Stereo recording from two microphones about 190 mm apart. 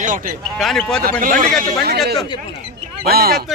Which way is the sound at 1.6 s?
55° right (ahead or behind).